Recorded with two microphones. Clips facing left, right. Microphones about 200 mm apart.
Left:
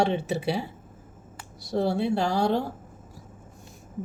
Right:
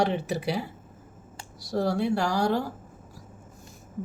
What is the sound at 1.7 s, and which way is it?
Speech, 25° left (ahead or behind).